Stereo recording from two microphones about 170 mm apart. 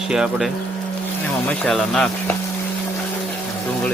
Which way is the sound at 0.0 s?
Centre (ahead or behind).